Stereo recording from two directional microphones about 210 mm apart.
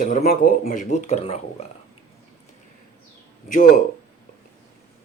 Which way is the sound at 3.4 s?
40° left (ahead or behind).